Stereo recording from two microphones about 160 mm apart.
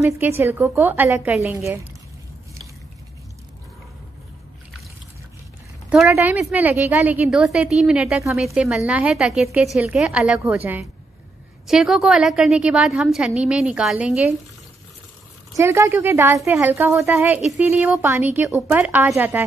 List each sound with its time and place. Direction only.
0.0 s a woman's voice: 15° right (ahead or behind)
5.9 s a woman's voice: centre (ahead or behind)
6.1 s a woman's voice: 15° right (ahead or behind)
15.5 s a woman's voice: 20° right (ahead or behind)